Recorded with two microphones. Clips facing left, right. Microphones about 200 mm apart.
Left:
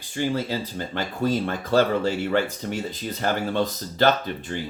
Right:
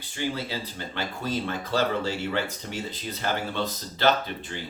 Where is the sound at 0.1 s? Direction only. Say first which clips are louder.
Left 5 dB; 45° left (ahead or behind).